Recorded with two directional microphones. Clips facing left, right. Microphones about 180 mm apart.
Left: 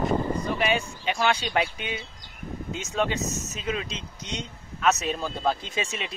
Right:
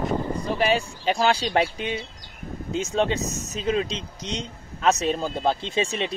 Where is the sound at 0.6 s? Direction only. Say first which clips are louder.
Right 3 dB; 35° right (ahead or behind).